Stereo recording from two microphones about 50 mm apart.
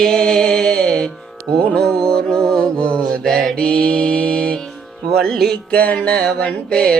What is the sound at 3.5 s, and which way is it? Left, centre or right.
Mantra, left.